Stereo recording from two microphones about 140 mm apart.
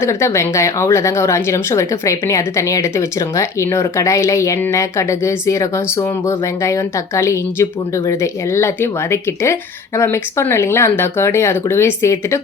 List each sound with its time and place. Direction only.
0.0 s speech: 20° left (ahead or behind)